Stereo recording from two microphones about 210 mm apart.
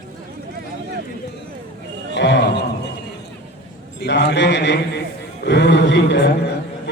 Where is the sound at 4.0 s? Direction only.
55° left (ahead or behind).